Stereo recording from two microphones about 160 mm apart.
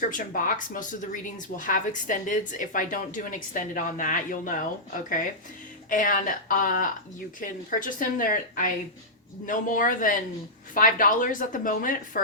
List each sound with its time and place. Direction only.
0.1 s speech: 60° left (ahead or behind)
5.9 s speech: 55° left (ahead or behind)